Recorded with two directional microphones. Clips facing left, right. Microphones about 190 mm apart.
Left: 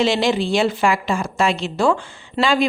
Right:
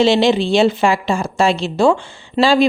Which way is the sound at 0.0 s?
25° right (ahead or behind).